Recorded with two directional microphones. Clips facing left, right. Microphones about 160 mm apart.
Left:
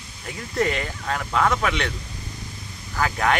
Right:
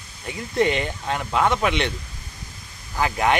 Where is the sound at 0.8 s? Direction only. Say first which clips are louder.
Right 2 dB; 20° right (ahead or behind).